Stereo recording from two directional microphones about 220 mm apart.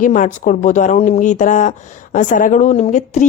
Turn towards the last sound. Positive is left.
turn(degrees=35)  # may be behind; listen again after turning